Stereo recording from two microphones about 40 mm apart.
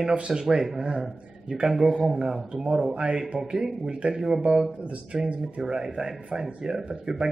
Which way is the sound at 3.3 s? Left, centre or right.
Centre.